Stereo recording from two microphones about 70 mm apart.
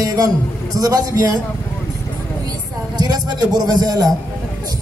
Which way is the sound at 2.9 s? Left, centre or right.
Right.